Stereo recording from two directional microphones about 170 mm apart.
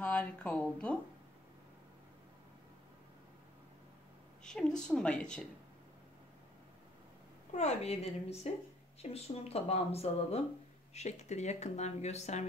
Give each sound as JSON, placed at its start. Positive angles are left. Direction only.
{"t": 0.0, "sound": "speech", "side_deg": 10}
{"t": 4.4, "sound": "a woman's voice", "side_deg": 5}
{"t": 7.5, "sound": "speech", "side_deg": 40}